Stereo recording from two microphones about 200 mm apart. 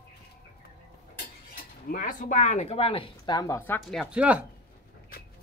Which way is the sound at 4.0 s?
5° right (ahead or behind).